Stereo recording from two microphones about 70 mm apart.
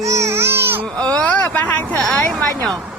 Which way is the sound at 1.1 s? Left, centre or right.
Centre.